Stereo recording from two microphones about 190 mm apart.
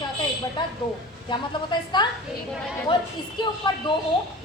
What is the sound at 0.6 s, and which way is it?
A woman's voice, 25° left (ahead or behind).